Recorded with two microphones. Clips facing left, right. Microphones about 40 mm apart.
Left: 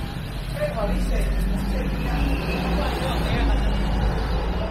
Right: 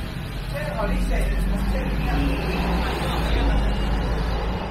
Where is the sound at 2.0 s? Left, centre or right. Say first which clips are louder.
Right 4 dB; right.